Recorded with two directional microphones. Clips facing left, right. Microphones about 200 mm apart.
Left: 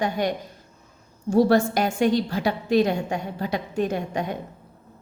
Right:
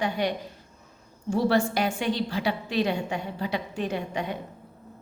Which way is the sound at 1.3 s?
45° left (ahead or behind).